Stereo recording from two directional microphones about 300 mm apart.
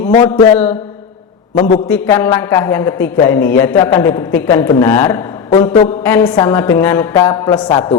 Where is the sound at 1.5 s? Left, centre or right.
Left.